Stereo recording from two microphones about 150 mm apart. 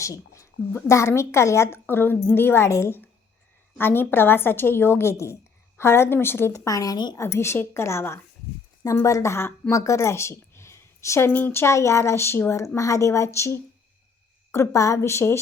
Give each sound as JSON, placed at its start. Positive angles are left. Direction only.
{"t": 0.0, "sound": "a woman's voice", "side_deg": 20}